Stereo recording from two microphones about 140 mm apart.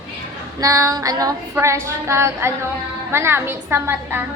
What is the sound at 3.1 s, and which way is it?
A woman's voice, 15° right (ahead or behind).